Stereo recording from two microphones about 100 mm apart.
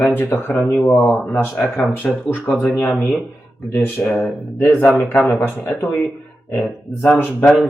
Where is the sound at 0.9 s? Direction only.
5° left (ahead or behind).